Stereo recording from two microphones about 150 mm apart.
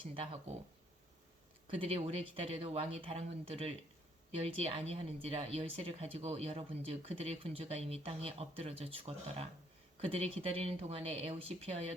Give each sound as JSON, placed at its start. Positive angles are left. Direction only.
{"t": 0.0, "sound": "speech", "side_deg": -35}
{"t": 1.6, "sound": "speech", "side_deg": -40}